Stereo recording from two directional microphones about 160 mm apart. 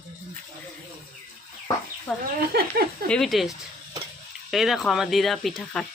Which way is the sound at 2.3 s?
80° right.